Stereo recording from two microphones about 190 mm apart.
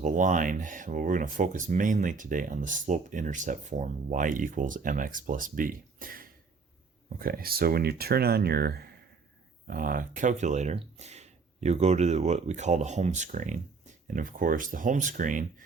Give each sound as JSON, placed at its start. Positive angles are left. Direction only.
{"t": 0.0, "sound": "speech", "side_deg": -40}